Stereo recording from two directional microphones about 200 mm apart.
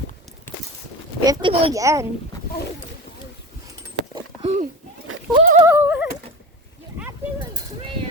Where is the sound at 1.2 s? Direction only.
20° right (ahead or behind).